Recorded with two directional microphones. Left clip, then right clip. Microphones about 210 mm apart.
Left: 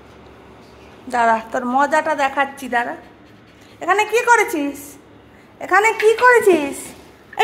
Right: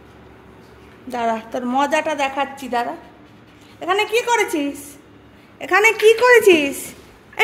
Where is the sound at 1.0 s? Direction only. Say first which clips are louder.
Left 6 dB; 15° right (ahead or behind).